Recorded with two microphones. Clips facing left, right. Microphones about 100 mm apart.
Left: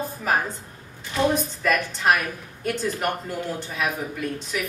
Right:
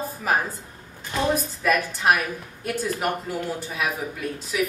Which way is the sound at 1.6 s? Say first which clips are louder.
Right 1 dB; 5° right (ahead or behind).